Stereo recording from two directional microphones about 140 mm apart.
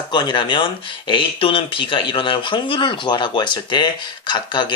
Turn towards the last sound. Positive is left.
turn(degrees=35)  # may be behind; listen again after turning